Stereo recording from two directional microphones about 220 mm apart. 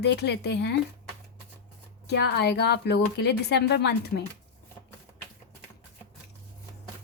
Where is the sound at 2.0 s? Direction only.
50° left (ahead or behind).